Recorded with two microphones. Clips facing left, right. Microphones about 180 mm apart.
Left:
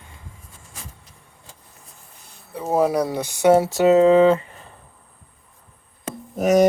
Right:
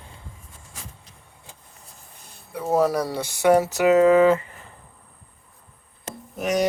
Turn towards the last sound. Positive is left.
turn(degrees=45)  # may be behind; listen again after turning